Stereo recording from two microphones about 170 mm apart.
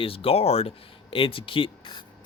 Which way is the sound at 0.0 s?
35° left (ahead or behind).